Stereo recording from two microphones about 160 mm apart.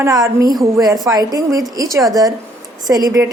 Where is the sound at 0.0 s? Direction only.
20° right (ahead or behind).